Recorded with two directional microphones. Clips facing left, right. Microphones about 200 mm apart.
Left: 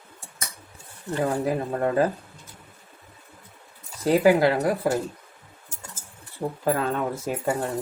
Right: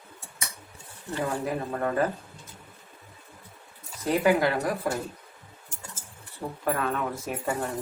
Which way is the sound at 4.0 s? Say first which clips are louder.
Left 5 dB; 30° left (ahead or behind).